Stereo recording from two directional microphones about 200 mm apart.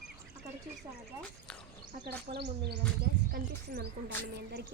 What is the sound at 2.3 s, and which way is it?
Speech, 55° right (ahead or behind).